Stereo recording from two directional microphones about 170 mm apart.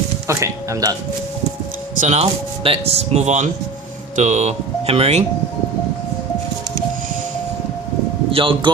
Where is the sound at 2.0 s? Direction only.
40° right (ahead or behind).